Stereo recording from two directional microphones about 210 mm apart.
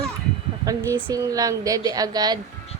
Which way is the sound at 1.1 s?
15° right (ahead or behind).